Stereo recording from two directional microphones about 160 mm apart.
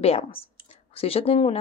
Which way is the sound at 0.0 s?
40° left (ahead or behind).